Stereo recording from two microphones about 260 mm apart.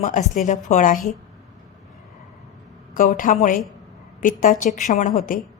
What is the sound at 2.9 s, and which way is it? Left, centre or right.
A woman's voice, left.